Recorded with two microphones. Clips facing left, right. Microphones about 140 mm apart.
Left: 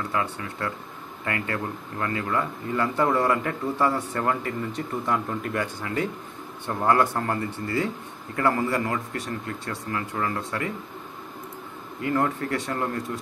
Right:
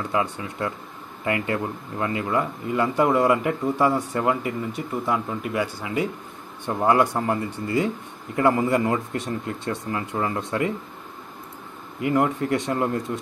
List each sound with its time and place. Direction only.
0.1 s speech: 20° right (ahead or behind)
12.0 s speech: 15° right (ahead or behind)